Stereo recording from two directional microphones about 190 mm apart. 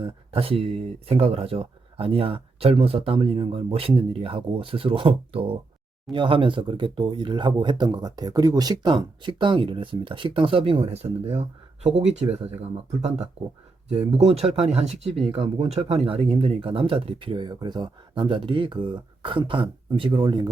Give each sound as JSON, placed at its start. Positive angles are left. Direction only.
{"t": 0.0, "sound": "speech", "side_deg": -30}